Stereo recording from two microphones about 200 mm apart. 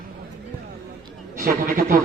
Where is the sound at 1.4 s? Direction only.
50° right (ahead or behind).